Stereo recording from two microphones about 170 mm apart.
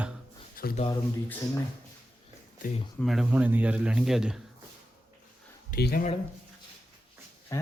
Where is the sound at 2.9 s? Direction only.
Centre (ahead or behind).